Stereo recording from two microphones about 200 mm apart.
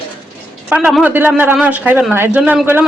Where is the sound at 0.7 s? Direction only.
5° right (ahead or behind).